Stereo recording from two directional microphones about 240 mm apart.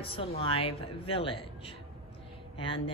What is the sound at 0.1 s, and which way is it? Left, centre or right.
Speech, left.